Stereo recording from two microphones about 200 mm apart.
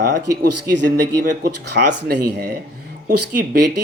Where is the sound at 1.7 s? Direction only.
60° right (ahead or behind).